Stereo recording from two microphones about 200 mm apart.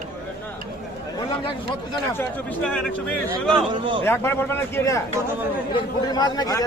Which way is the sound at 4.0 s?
10° left (ahead or behind).